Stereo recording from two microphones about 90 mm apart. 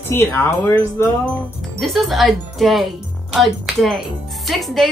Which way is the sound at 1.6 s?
Centre (ahead or behind).